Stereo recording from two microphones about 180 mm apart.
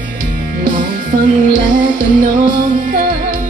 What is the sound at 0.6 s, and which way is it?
Music, 50° right (ahead or behind).